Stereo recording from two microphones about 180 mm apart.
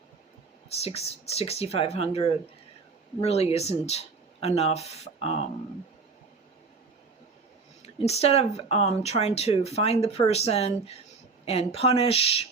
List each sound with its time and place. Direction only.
0.7 s speech: 35° left (ahead or behind)
7.8 s speech: 35° left (ahead or behind)